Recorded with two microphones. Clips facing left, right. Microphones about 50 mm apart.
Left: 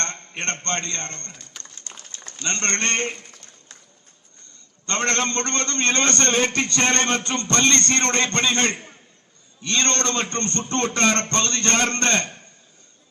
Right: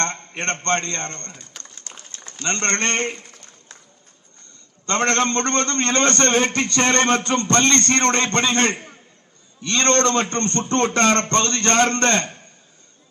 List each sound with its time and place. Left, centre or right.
0.0 s a man's voice: right
2.2 s a sound: right
4.9 s a man's voice: right